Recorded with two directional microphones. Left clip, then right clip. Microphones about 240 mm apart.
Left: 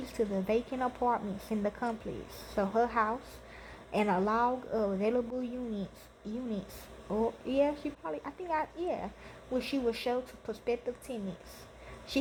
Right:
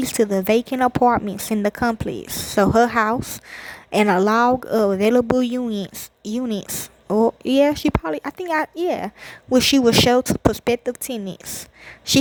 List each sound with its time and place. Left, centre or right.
0.0 s speech: right